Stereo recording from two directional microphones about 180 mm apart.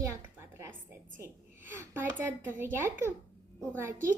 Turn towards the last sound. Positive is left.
turn(degrees=-15)  # may be behind; listen again after turning